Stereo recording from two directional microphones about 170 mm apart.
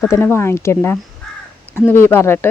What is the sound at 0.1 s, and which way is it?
Speech, 15° left (ahead or behind).